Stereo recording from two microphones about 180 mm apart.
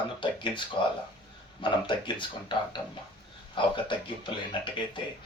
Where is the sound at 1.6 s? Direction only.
25° left (ahead or behind).